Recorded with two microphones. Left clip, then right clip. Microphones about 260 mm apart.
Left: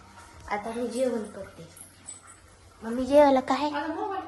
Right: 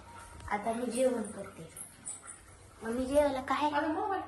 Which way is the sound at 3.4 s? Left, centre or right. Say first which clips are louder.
Left 4 dB; centre.